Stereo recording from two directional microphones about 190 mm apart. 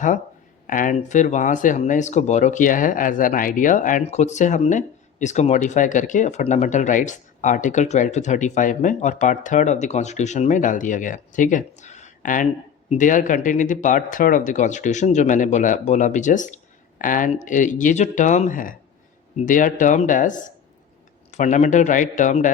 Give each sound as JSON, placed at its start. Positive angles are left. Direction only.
{"t": 0.7, "sound": "speech", "side_deg": 45}